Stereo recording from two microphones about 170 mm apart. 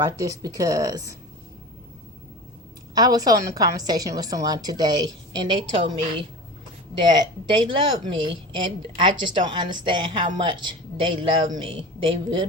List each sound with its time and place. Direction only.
0.0 s a woman's voice: 20° right (ahead or behind)
2.9 s a woman's voice: 25° right (ahead or behind)